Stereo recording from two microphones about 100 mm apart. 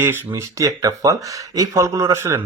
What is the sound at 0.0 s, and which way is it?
Speech, 25° right (ahead or behind).